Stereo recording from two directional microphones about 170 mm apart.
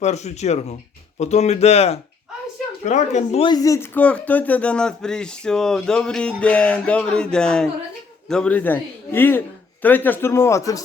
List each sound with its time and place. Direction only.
0.0 s speech: 40° left (ahead or behind)
3.4 s a man's voice: 20° left (ahead or behind)